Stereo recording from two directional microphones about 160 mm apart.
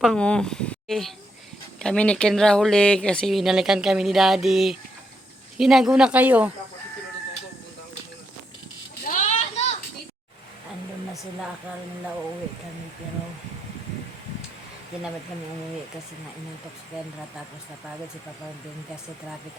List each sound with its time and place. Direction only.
0.0 s speech: 5° left (ahead or behind)
9.0 s children playing: 50° left (ahead or behind)